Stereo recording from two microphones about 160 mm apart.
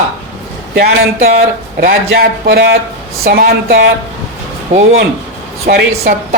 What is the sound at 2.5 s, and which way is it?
Speech, 90° right.